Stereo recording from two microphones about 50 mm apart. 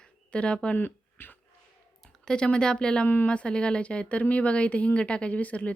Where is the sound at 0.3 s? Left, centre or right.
Left.